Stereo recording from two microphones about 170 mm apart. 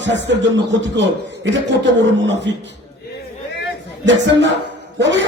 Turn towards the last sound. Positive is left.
turn(degrees=-90)